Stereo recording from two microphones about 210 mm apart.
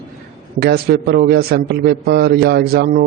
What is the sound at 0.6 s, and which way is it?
A man's voice, 45° right (ahead or behind).